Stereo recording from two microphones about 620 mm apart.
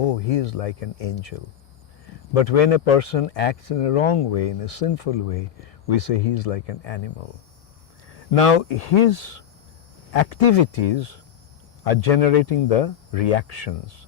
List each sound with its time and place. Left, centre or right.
0.0 s speech: left
8.3 s speech: left